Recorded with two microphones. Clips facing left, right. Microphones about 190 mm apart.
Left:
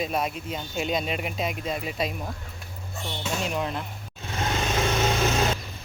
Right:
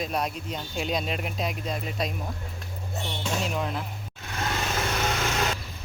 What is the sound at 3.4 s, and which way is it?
Speech, centre (ahead or behind).